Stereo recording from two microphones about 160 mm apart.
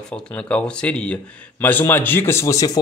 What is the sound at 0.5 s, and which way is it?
Speech, 10° left (ahead or behind).